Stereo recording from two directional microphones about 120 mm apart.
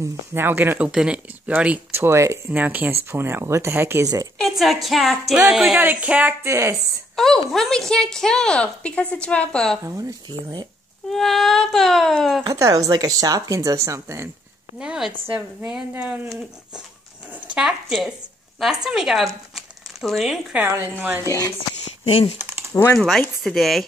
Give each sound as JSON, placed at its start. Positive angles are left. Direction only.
{"t": 0.0, "sound": "a woman's voice", "side_deg": -20}
{"t": 4.4, "sound": "a woman's voice", "side_deg": 0}
{"t": 7.5, "sound": "a woman's voice", "side_deg": 5}
{"t": 9.8, "sound": "a woman's voice", "side_deg": -25}
{"t": 11.1, "sound": "a woman's voice", "side_deg": 0}
{"t": 12.4, "sound": "a woman's voice", "side_deg": -25}
{"t": 14.8, "sound": "a woman's voice", "side_deg": -5}
{"t": 17.6, "sound": "a woman's voice", "side_deg": -5}
{"t": 20.5, "sound": "speech", "side_deg": -20}
{"t": 21.8, "sound": "a sound", "side_deg": 45}
{"t": 22.4, "sound": "a sound", "side_deg": -15}
{"t": 22.9, "sound": "a woman's voice", "side_deg": 5}